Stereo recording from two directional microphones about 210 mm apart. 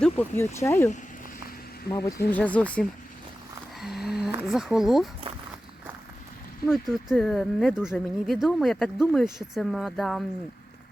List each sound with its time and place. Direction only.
0.0 s speech: 10° left (ahead or behind)
1.9 s speech: 15° left (ahead or behind)
3.8 s a sound: centre (ahead or behind)
7.1 s speech: centre (ahead or behind)